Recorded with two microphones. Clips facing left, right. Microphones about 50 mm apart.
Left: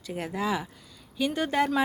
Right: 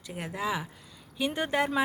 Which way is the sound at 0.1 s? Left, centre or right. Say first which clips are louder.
Left 3 dB; centre.